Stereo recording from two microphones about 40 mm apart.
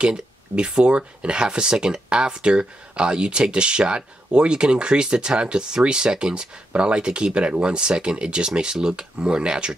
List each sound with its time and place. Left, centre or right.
0.0 s speech: right